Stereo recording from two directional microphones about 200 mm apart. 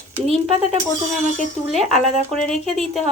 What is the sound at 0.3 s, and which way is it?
Speech, 30° right (ahead or behind).